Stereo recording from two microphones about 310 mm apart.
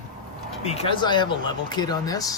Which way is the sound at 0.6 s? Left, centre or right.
Centre.